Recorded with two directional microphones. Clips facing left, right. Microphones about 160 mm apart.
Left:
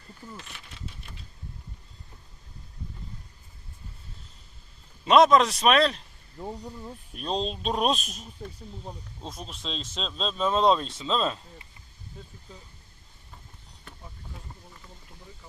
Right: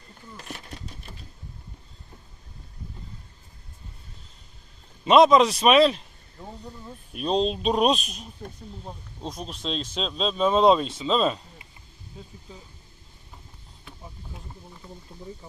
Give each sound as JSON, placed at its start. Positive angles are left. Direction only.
{"t": 0.3, "sound": "a sound", "side_deg": -45}
{"t": 5.0, "sound": "speech", "side_deg": 0}
{"t": 7.3, "sound": "speech", "side_deg": 0}